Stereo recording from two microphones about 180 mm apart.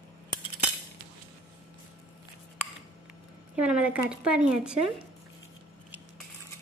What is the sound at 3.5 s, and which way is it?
A woman's voice, 5° right (ahead or behind).